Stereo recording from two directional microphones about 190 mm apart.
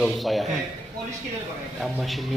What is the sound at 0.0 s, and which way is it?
Speech, centre (ahead or behind).